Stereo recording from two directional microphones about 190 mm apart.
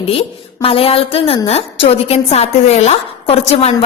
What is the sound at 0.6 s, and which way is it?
A woman's voice, 30° left (ahead or behind).